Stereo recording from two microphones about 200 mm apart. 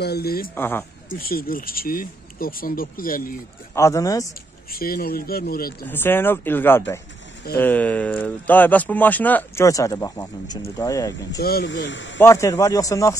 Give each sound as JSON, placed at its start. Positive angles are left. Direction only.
{"t": 0.0, "sound": "speech", "side_deg": 50}
{"t": 0.6, "sound": "speech", "side_deg": 10}
{"t": 1.2, "sound": "speech", "side_deg": 45}
{"t": 3.7, "sound": "speech", "side_deg": 15}
{"t": 4.7, "sound": "speech", "side_deg": 45}
{"t": 5.9, "sound": "speech", "side_deg": 10}
{"t": 11.3, "sound": "speech", "side_deg": 55}
{"t": 12.2, "sound": "speech", "side_deg": 15}